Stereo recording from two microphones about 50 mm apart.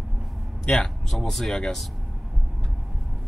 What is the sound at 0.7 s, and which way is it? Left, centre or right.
Speech, centre.